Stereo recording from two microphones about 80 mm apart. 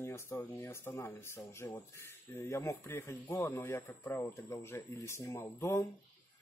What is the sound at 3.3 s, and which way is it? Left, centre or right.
Speech, left.